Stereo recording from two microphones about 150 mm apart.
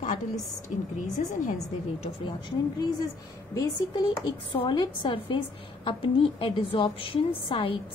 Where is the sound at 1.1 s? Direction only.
55° left (ahead or behind).